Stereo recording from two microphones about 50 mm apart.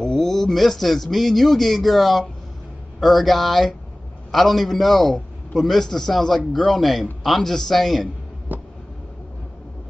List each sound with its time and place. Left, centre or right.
0.0 s a man's voice: centre
8.5 s vehicle: right